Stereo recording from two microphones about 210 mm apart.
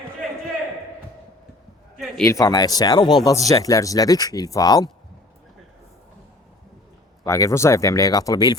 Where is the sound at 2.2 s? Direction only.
15° left (ahead or behind).